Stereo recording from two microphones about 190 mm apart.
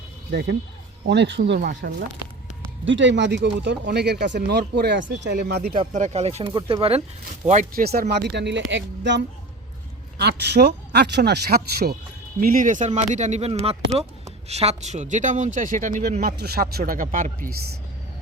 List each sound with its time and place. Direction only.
0.3 s speech: 60° right (ahead or behind)
2.8 s speech: 75° right (ahead or behind); by 5.7 s 55° right (ahead or behind)
5.9 s speech: 35° right (ahead or behind)
7.4 s speech: 40° right (ahead or behind)